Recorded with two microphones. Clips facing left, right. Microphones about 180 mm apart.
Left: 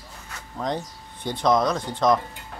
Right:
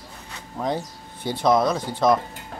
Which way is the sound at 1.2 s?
10° right (ahead or behind).